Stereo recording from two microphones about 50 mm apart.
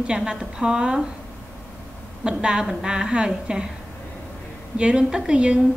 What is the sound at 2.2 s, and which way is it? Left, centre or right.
A woman's voice, centre.